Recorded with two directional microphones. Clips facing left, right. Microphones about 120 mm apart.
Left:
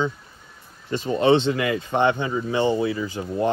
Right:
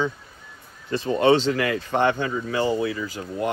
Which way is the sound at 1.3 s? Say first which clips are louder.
Left 1 dB; 25° left (ahead or behind).